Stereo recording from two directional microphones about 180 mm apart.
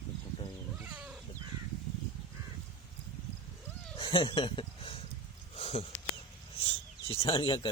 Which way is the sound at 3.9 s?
30° left (ahead or behind).